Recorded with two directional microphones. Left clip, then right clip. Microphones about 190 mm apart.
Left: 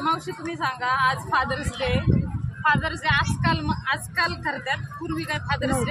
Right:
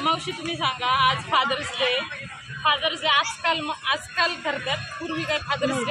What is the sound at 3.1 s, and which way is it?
Speech, 25° left (ahead or behind).